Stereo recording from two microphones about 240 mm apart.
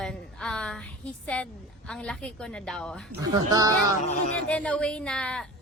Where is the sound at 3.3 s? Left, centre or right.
Centre.